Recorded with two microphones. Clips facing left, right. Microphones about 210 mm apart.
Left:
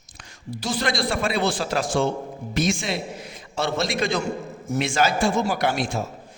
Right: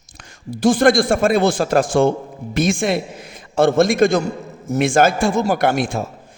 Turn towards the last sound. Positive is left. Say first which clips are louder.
# right 6 dB
turn(degrees=-55)  # may be behind; listen again after turning